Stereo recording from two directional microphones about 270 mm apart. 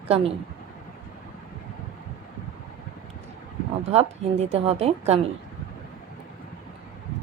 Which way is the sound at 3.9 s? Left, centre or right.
Right.